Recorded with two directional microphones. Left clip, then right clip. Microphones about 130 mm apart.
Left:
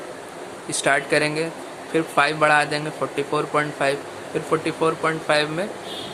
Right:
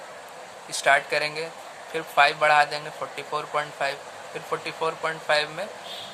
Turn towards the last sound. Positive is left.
turn(degrees=-15)  # may be behind; listen again after turning